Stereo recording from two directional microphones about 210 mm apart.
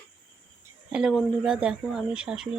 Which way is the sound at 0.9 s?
5° right (ahead or behind).